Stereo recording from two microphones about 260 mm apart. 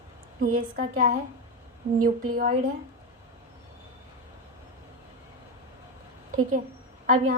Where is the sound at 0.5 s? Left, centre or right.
Right.